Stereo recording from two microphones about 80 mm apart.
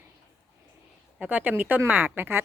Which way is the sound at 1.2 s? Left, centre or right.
Centre.